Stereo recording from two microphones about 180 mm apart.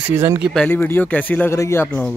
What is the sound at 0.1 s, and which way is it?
Speech, 15° right (ahead or behind).